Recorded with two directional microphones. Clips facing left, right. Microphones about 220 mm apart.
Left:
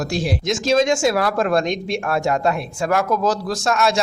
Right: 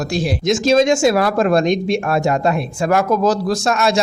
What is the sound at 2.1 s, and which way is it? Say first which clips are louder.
Speech: even; 15° right (ahead or behind).